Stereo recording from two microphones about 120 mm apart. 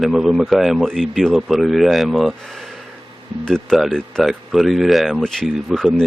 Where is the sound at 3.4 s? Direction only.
5° left (ahead or behind).